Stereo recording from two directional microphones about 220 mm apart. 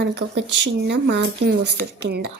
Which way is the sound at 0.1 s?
50° right (ahead or behind).